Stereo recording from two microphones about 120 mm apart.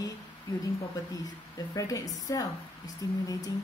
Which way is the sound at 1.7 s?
30° left (ahead or behind).